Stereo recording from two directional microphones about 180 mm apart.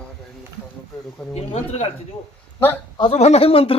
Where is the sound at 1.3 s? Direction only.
35° left (ahead or behind).